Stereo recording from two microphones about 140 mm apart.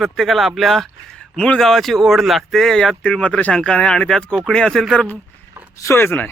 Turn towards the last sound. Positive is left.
turn(degrees=15)  # may be behind; listen again after turning